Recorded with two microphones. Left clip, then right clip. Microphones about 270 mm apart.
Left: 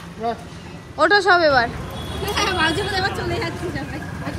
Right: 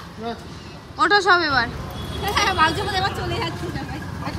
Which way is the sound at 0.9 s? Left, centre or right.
Centre.